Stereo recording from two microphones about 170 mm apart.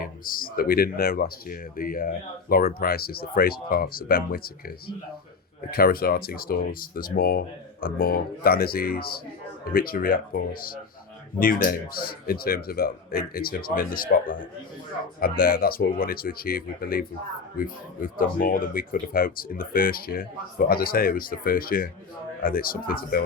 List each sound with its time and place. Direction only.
0.0 s speech: 55° left (ahead or behind)